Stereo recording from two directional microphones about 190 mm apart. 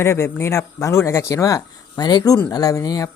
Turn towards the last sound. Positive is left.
turn(degrees=20)  # may be behind; listen again after turning